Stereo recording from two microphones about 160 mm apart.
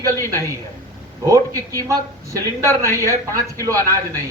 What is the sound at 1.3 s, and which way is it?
Speech, 20° right (ahead or behind).